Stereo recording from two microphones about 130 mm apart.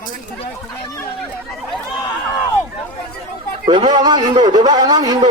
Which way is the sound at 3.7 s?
35° right (ahead or behind).